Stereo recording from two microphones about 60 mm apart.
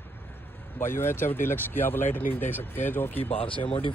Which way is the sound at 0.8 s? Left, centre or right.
Left.